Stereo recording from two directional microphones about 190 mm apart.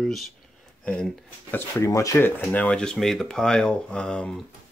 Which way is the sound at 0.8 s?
5° left (ahead or behind).